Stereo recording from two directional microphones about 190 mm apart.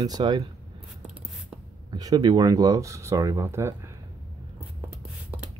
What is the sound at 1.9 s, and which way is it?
Speech, 20° right (ahead or behind).